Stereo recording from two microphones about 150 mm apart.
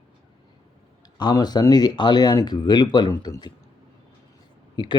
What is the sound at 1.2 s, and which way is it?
Speech, 25° left (ahead or behind).